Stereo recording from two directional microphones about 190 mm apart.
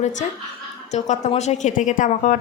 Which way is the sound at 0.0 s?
40° left (ahead or behind).